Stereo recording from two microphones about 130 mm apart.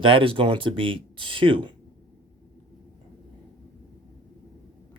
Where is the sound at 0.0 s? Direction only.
45° right (ahead or behind).